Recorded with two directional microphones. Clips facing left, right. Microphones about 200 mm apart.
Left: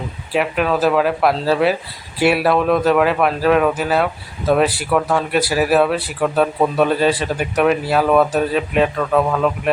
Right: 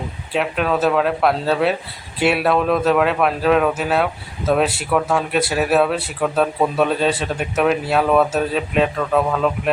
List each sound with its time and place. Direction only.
0.3 s speech: 5° left (ahead or behind)